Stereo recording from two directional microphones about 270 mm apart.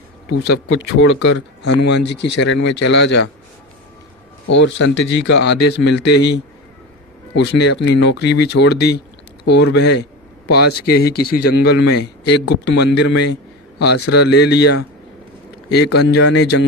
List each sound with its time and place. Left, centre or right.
0.7 s speech: left
4.5 s speech: left
7.3 s speech: left